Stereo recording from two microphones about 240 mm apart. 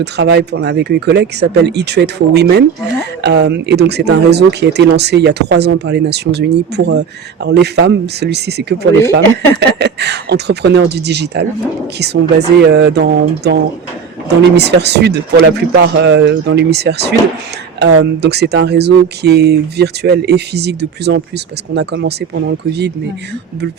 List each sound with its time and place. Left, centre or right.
0.0 s speech: right